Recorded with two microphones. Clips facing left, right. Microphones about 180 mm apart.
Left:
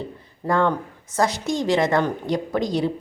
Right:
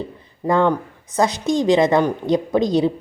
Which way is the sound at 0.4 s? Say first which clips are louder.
Right 4 dB; 20° right (ahead or behind).